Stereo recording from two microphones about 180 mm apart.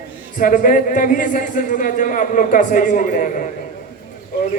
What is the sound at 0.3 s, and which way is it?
A man's voice, 50° left (ahead or behind).